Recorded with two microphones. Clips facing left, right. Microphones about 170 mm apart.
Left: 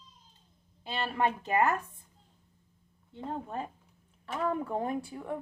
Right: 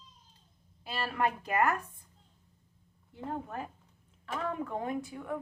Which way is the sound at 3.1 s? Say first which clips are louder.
Left 1 dB; 25° left (ahead or behind).